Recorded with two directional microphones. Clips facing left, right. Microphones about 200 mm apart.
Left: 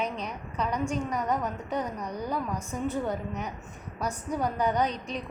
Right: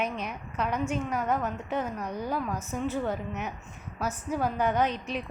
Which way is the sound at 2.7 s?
15° left (ahead or behind).